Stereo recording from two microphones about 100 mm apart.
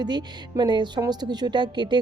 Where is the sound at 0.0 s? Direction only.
45° right (ahead or behind).